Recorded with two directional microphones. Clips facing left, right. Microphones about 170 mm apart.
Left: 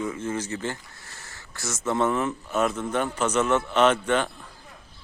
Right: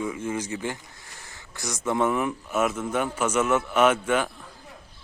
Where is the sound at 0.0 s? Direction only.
10° right (ahead or behind).